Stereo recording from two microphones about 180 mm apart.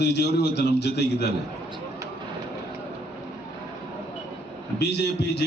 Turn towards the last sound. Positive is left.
turn(degrees=70)  # may be behind; listen again after turning